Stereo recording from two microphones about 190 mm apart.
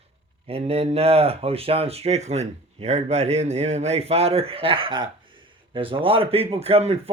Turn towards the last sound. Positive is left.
turn(degrees=-35)  # may be behind; listen again after turning